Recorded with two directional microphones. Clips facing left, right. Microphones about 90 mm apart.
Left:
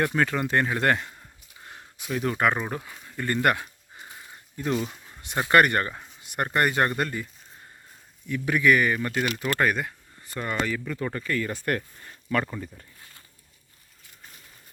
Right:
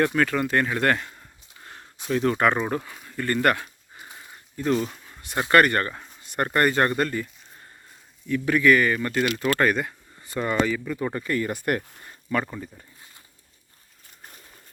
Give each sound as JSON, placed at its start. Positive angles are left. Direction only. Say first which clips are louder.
{"t": 0.0, "sound": "speech", "louder": "right 2 dB", "side_deg": 20}
{"t": 3.1, "sound": "speech", "louder": "right 2 dB", "side_deg": 15}
{"t": 8.3, "sound": "speech", "louder": "right 3 dB", "side_deg": 15}
{"t": 10.2, "sound": "speech", "louder": "right 5 dB", "side_deg": -5}